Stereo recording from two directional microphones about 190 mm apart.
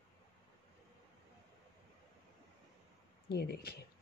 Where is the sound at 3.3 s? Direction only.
55° left (ahead or behind).